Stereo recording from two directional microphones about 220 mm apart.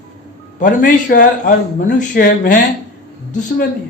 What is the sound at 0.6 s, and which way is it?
A man's voice, 35° left (ahead or behind).